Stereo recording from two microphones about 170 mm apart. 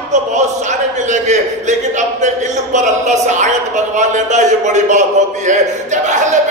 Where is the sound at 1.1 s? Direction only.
45° right (ahead or behind).